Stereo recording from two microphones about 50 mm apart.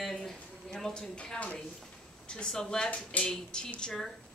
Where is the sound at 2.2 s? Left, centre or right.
Centre.